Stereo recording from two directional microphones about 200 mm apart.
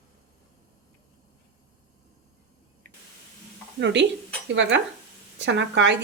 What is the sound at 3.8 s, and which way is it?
Speech, 60° right (ahead or behind).